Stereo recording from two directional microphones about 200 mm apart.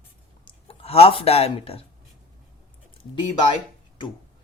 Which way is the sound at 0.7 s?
30° left (ahead or behind).